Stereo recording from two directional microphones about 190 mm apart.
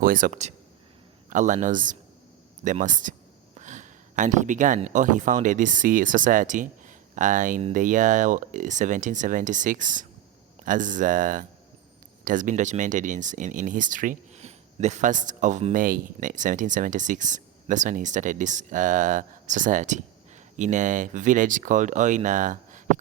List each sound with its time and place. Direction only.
0.0 s speech: 45° right (ahead or behind)